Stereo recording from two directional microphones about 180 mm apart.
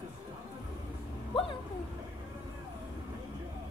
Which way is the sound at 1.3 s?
30° left (ahead or behind).